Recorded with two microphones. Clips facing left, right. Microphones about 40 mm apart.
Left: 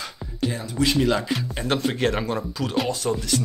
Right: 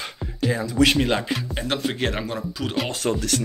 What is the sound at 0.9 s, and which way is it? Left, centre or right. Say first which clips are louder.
Speech: left 1 dB; right.